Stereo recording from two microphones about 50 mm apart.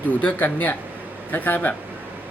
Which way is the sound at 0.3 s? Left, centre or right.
Left.